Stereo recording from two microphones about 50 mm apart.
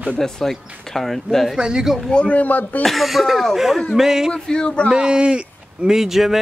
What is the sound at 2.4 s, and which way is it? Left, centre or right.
Speech, left.